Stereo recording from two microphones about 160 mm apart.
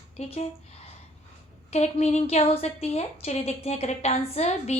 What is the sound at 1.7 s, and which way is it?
A woman's voice, 40° left (ahead or behind).